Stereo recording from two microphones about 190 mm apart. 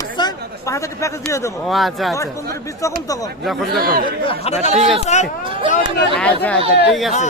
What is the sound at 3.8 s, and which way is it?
Speech, 50° right (ahead or behind).